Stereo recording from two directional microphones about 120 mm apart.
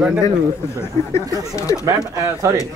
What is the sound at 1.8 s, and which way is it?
Speech, 25° right (ahead or behind).